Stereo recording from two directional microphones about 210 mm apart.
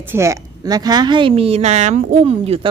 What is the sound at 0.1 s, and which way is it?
A woman's voice, 15° right (ahead or behind).